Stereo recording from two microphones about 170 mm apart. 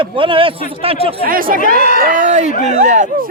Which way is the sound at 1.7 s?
60° right (ahead or behind).